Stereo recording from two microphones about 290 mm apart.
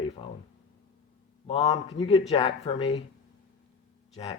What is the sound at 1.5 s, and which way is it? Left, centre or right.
Speech, left.